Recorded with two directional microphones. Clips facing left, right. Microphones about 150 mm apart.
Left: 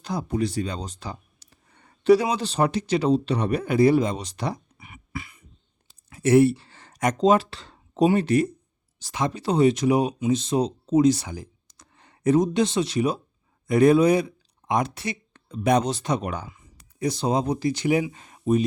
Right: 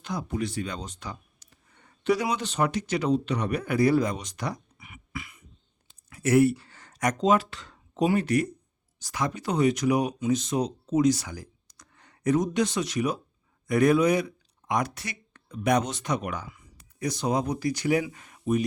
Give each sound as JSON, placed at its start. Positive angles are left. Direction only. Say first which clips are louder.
{"t": 0.0, "sound": "speech", "louder": "left 4 dB", "side_deg": 35}
{"t": 5.9, "sound": "a sound", "louder": "left 4 dB", "side_deg": 30}
{"t": 6.9, "sound": "speech", "louder": "left 4 dB", "side_deg": 25}